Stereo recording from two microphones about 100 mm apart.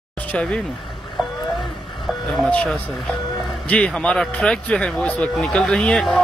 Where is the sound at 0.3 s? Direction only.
10° left (ahead or behind).